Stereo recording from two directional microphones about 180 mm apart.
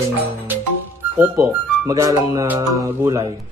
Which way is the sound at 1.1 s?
15° right (ahead or behind).